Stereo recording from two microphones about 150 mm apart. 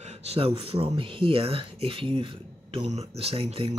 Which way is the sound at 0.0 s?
45° right (ahead or behind).